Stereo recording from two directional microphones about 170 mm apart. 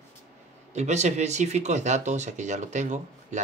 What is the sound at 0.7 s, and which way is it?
Speech, 40° right (ahead or behind).